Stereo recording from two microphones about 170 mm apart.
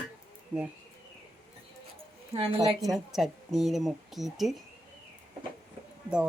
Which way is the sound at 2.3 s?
30° right (ahead or behind).